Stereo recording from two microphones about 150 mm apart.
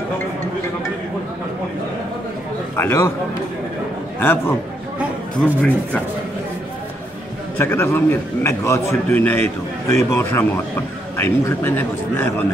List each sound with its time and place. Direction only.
2.7 s a man's voice: 15° left (ahead or behind)
4.2 s a man's voice: 15° left (ahead or behind)
7.5 s a man's voice: 15° left (ahead or behind)